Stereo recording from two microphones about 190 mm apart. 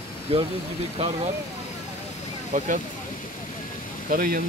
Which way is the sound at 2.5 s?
45° right (ahead or behind).